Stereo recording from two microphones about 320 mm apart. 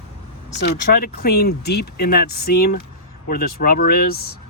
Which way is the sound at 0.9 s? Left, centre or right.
Left.